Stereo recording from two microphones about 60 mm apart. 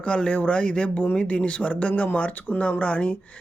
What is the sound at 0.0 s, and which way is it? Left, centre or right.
Speech, centre.